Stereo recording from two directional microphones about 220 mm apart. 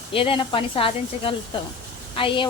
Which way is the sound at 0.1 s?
25° left (ahead or behind).